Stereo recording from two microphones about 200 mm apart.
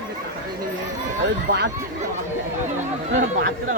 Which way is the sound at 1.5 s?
55° right (ahead or behind).